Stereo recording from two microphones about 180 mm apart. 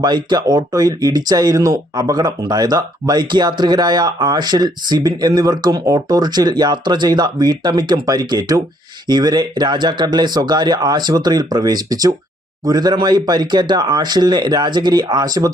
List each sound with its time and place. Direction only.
0.0 s speech: 25° right (ahead or behind)